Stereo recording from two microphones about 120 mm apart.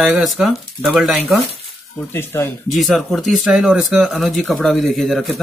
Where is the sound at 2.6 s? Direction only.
Centre (ahead or behind).